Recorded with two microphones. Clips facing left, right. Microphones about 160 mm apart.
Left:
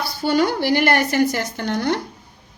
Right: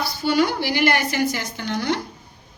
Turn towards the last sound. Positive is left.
turn(degrees=50)  # may be behind; listen again after turning